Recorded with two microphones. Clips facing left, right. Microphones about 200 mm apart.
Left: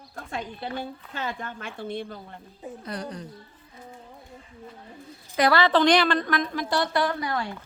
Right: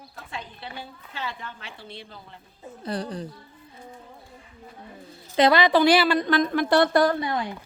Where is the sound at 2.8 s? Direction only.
30° right (ahead or behind).